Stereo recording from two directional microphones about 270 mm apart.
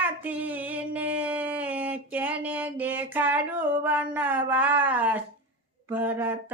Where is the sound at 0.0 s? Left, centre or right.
Centre.